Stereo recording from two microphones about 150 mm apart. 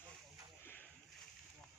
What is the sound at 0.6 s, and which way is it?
Boat, 15° left (ahead or behind).